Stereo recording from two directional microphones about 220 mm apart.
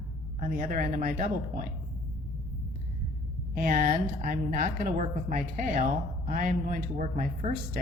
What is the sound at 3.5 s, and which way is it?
A woman's voice, 40° right (ahead or behind).